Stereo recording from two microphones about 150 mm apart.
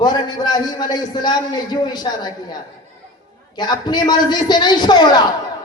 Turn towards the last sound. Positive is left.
turn(degrees=30)  # may be behind; listen again after turning